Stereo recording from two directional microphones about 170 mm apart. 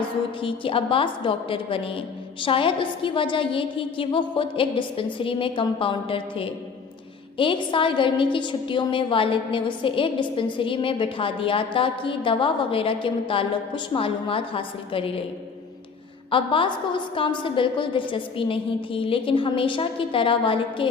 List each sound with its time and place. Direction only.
0.4 s a woman's voice: 30° left (ahead or behind)
16.3 s a woman's voice: 30° left (ahead or behind)